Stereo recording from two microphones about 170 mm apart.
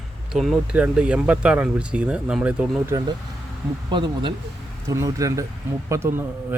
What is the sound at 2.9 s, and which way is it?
Speech, 25° right (ahead or behind).